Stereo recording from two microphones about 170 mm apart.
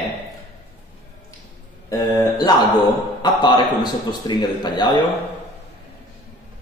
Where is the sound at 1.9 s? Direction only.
25° left (ahead or behind).